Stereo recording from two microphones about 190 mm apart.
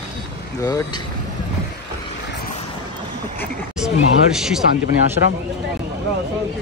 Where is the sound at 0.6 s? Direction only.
20° left (ahead or behind).